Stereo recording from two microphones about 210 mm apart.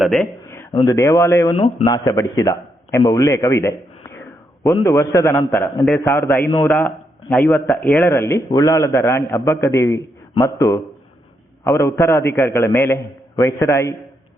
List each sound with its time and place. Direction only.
0.0 s speech: centre (ahead or behind)
0.9 s speech: 15° left (ahead or behind)
1.5 s a man's voice: 25° left (ahead or behind)